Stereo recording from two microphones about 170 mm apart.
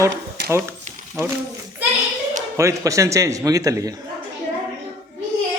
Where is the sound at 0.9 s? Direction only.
45° right (ahead or behind).